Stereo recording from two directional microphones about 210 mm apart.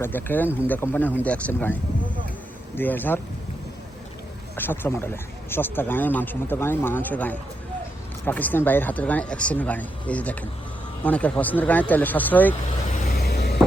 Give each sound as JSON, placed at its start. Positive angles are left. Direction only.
{"t": 0.0, "sound": "speech", "side_deg": 10}
{"t": 4.5, "sound": "speech", "side_deg": 10}
{"t": 13.1, "sound": "a sound", "side_deg": 50}